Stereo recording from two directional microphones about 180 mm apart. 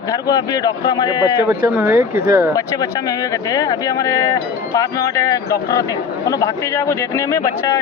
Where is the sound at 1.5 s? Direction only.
10° right (ahead or behind).